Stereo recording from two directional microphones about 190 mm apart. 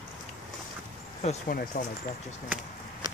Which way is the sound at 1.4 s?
50° left (ahead or behind).